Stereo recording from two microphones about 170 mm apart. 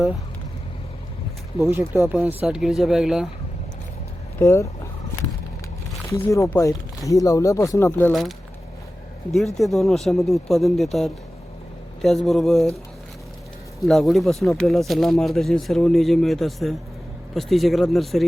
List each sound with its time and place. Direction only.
1.7 s speech: 10° right (ahead or behind)
4.4 s speech: 15° left (ahead or behind)
6.1 s speech: 15° left (ahead or behind)
9.3 s speech: centre (ahead or behind)
13.8 s speech: centre (ahead or behind)